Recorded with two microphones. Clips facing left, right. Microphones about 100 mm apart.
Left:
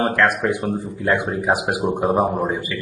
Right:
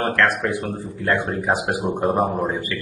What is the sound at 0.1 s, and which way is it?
Speech, 15° left (ahead or behind).